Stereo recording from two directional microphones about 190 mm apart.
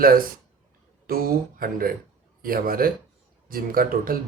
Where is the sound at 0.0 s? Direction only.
50° right (ahead or behind).